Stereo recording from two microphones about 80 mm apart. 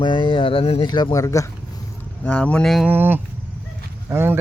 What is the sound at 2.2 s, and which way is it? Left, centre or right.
Speech, centre.